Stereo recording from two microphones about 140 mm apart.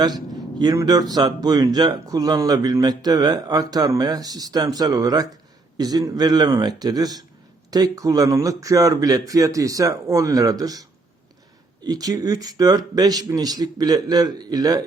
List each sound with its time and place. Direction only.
0.6 s speech: 25° right (ahead or behind)